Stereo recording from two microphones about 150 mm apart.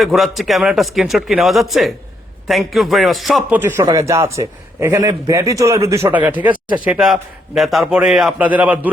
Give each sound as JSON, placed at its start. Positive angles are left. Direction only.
{"t": 0.0, "sound": "a man's voice", "side_deg": 0}
{"t": 3.5, "sound": "a man's voice", "side_deg": -15}